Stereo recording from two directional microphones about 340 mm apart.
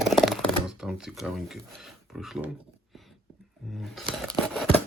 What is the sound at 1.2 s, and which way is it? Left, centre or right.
Speech, centre.